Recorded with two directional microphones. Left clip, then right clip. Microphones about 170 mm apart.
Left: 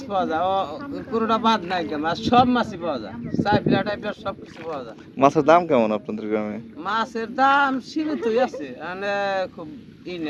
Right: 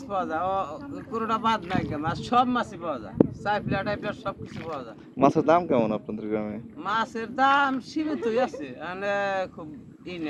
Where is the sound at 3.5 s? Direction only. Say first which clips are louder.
Left 8 dB; 30° right (ahead or behind).